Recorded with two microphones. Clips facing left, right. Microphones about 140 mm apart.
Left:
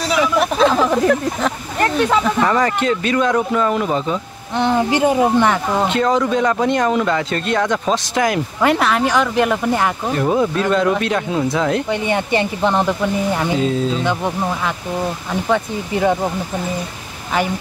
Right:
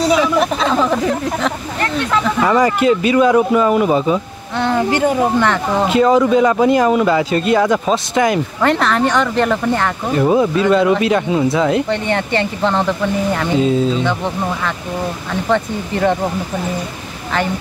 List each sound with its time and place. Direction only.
0.2 s speech: centre (ahead or behind)
2.4 s speech: 10° right (ahead or behind)
4.6 s speech: 15° left (ahead or behind)
5.9 s speech: 5° right (ahead or behind)
10.1 s speech: 5° right (ahead or behind)
11.9 s speech: 10° left (ahead or behind)
13.6 s speech: centre (ahead or behind)
15.5 s speech: 5° left (ahead or behind)